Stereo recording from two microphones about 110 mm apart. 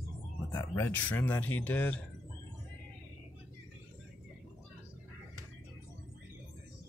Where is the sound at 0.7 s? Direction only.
20° left (ahead or behind).